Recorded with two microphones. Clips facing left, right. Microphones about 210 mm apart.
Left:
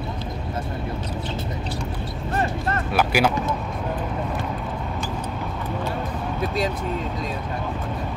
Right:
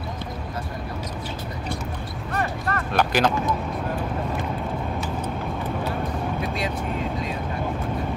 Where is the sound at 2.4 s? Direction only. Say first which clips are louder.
Left 2 dB; 25° left (ahead or behind).